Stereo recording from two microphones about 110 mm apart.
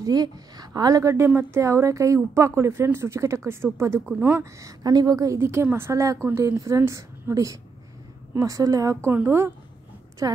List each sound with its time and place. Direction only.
0.0 s a woman's voice: 35° right (ahead or behind); by 4.5 s 15° right (ahead or behind)
4.6 s a woman's voice: 35° right (ahead or behind)
10.2 s a woman's voice: 30° right (ahead or behind)